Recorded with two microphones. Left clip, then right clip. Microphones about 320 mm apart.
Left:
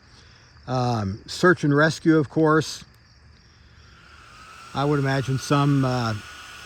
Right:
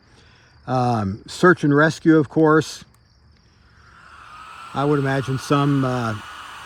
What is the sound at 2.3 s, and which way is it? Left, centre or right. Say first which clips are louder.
Speech: right 4 dB; right.